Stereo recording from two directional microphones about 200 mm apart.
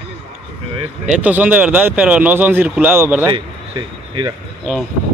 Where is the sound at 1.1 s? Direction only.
10° right (ahead or behind).